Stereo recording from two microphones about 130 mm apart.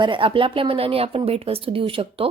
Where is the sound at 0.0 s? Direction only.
40° right (ahead or behind).